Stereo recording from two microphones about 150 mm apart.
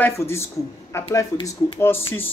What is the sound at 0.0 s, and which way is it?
Speech, 20° left (ahead or behind).